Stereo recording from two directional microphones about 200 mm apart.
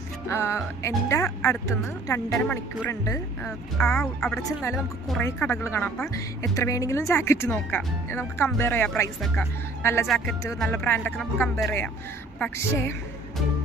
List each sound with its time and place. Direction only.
0.3 s speech: 15° left (ahead or behind)
5.2 s speech: 10° left (ahead or behind)